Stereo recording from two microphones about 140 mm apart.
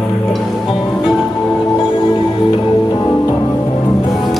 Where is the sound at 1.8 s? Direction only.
40° left (ahead or behind).